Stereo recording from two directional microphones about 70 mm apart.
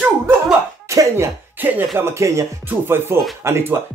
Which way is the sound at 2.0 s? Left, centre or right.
Right.